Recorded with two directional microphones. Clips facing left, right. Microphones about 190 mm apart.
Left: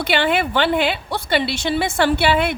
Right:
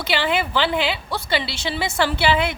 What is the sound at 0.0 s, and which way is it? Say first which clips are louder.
A woman's voice: left 3 dB; 55° left (ahead or behind).